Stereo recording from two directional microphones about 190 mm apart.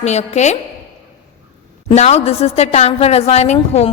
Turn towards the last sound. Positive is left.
turn(degrees=35)  # may be behind; listen again after turning